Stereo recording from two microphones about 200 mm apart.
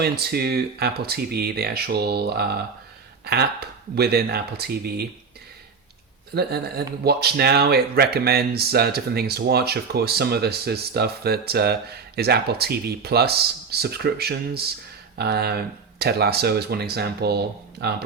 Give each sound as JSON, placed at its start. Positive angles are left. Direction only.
{"t": 0.0, "sound": "speech", "side_deg": -50}
{"t": 6.3, "sound": "speech", "side_deg": -50}